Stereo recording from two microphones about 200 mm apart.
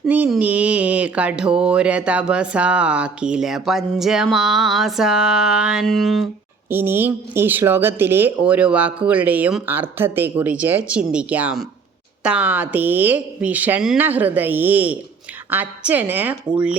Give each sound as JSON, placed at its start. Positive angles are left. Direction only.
{"t": 0.0, "sound": "speech", "side_deg": -5}
{"t": 6.7, "sound": "speech", "side_deg": -10}